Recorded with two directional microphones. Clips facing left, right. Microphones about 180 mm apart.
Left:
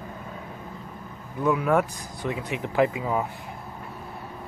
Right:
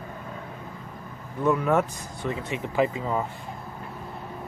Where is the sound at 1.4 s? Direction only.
5° left (ahead or behind).